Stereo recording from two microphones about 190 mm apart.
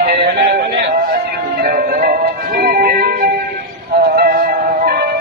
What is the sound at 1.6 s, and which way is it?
Music, 50° right (ahead or behind).